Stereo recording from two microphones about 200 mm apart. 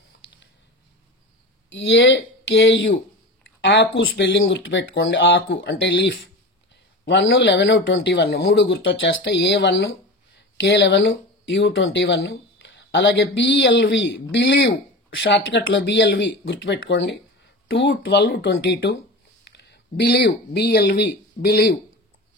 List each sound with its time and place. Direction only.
1.7 s a man's voice: 65° left (ahead or behind)
3.7 s speech: 50° left (ahead or behind)
4.0 s a man's voice: 65° left (ahead or behind)